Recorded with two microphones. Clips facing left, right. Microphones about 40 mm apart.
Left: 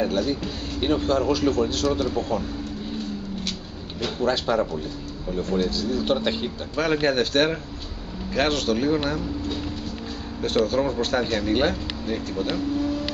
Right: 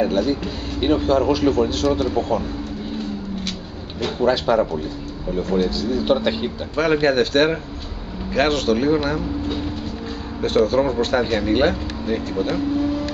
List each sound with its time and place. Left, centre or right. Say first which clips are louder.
0.0 s speech: right 4 dB; centre
4.0 s speech: right 5 dB; centre
10.4 s speech: right 5 dB; centre
12.5 s a sound: right 3 dB; centre